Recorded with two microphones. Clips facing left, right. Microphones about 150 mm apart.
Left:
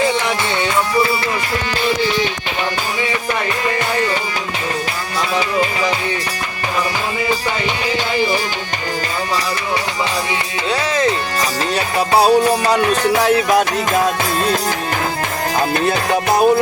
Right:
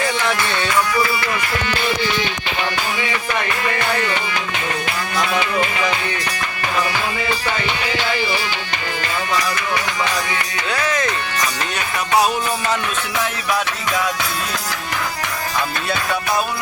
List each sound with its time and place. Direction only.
0.0 s music: 20° left (ahead or behind)
10.7 s speech: 30° left (ahead or behind)
11.9 s music: 30° left (ahead or behind)
16.0 s music: 45° left (ahead or behind)